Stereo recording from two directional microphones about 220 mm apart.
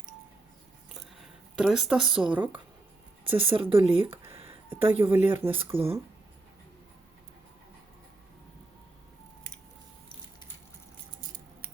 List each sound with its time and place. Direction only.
1.5 s speech: centre (ahead or behind)
3.3 s a woman's voice: 25° right (ahead or behind)
4.4 s a sound: 10° right (ahead or behind)
5.1 s speech: 10° right (ahead or behind)